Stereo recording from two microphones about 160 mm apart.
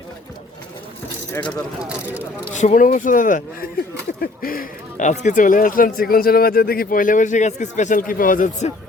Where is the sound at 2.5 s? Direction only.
50° left (ahead or behind).